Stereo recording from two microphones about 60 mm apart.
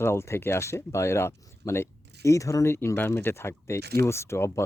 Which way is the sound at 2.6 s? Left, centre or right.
Left.